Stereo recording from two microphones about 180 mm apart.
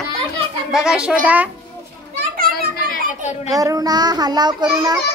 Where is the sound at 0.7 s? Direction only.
5° right (ahead or behind).